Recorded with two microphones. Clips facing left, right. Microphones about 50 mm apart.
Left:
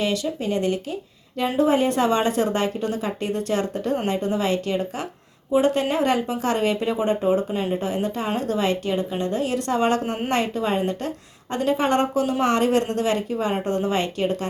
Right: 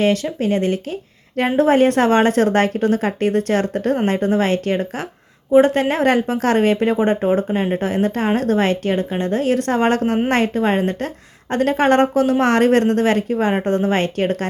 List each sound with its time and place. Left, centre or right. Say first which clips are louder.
0.0 s speech: right 6 dB; right